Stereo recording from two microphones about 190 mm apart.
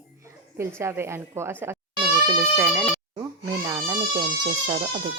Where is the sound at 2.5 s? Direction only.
5° right (ahead or behind).